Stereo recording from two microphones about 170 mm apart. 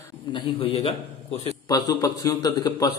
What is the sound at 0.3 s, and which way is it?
A man's voice, 30° left (ahead or behind).